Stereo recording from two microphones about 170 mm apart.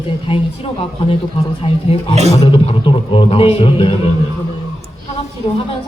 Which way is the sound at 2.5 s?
30° left (ahead or behind).